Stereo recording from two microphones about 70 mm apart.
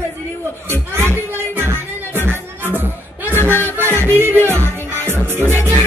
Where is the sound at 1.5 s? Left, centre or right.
Right.